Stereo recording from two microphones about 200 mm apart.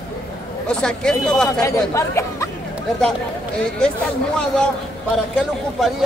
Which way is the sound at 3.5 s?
5° left (ahead or behind).